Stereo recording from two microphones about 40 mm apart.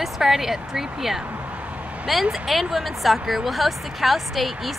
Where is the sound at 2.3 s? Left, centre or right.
Centre.